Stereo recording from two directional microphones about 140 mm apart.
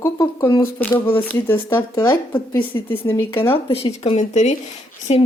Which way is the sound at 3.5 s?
45° left (ahead or behind).